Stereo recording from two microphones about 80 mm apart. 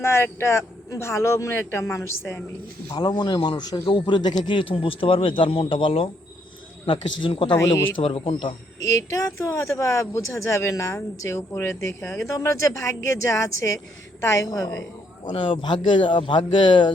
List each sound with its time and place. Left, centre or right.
0.0 s speech: left
2.9 s a man's voice: left
8.9 s speech: left
12.3 s speech: left
15.3 s a man's voice: left